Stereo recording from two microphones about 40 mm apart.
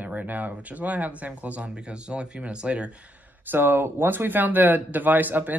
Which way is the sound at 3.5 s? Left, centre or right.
Right.